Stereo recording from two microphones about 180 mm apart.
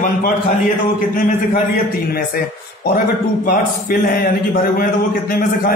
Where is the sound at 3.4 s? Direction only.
55° left (ahead or behind).